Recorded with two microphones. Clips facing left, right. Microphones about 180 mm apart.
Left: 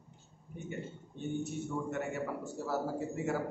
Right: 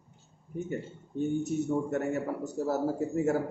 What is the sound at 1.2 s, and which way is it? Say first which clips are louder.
A man's voice: right 7 dB; 45° right (ahead or behind).